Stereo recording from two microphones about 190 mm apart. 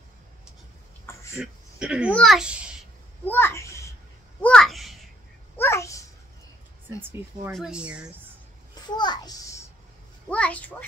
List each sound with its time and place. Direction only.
1.4 s speech: 5° right (ahead or behind)
3.3 s a child's voice: 10° left (ahead or behind)
4.4 s a sound: 5° left (ahead or behind)
5.6 s a sound: 15° left (ahead or behind)
7.0 s speech: 10° right (ahead or behind)
8.9 s a child's voice: 20° left (ahead or behind)
10.3 s a child's voice: 5° left (ahead or behind)